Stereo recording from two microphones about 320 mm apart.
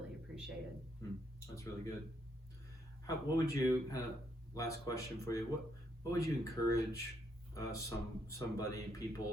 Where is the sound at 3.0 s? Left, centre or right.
Centre.